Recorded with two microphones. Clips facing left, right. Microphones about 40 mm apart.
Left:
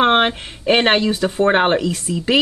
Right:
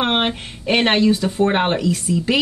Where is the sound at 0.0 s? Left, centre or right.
Centre.